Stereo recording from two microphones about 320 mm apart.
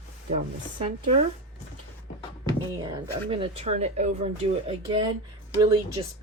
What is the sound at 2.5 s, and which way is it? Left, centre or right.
Speech, centre.